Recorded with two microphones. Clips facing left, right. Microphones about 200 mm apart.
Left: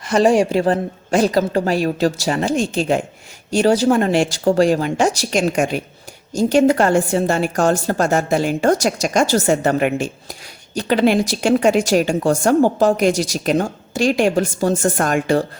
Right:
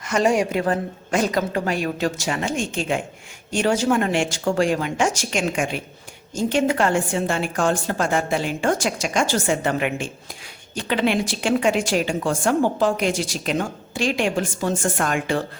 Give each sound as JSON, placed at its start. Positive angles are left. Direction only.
{"t": 0.0, "sound": "a woman's voice", "side_deg": 30}